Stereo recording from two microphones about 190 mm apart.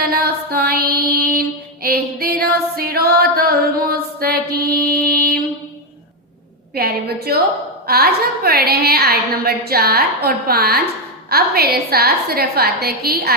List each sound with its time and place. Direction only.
0.0 s music: 55° right (ahead or behind)
1.0 s female singing: 55° right (ahead or behind)
6.7 s a woman's voice: 55° right (ahead or behind)